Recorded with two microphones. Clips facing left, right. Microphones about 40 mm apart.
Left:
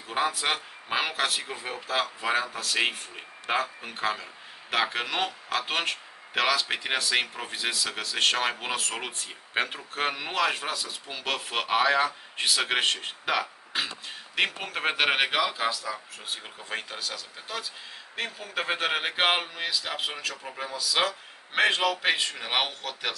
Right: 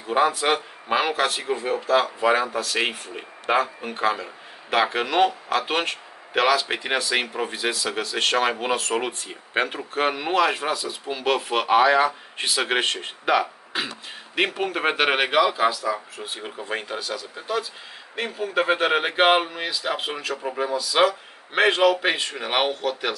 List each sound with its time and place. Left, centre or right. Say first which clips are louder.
0.0 s a man's voice: right 7 dB; centre
16.3 s speech: right 8 dB; centre
16.6 s speech: right 5 dB; centre